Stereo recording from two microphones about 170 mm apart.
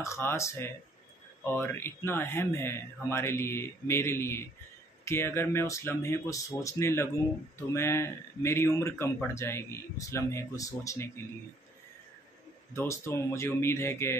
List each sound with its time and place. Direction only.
0.0 s speech: 15° left (ahead or behind)
12.7 s speech: 15° left (ahead or behind)